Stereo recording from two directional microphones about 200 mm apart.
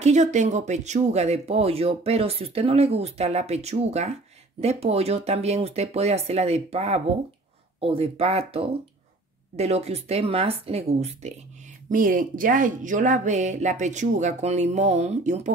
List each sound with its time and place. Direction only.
0.0 s speech: 35° right (ahead or behind)
11.9 s speech: 45° right (ahead or behind)